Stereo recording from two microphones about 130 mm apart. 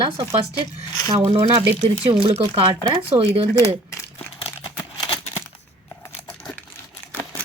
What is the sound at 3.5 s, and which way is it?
Speech, 20° left (ahead or behind).